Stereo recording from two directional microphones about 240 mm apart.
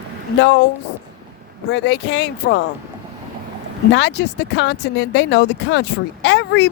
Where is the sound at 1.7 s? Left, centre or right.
Left.